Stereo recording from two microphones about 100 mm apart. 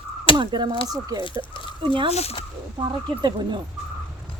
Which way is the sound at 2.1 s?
90° left.